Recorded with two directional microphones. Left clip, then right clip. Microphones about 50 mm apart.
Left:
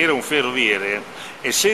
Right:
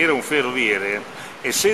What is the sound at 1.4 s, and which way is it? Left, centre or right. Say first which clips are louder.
Speech: left 1 dB; left.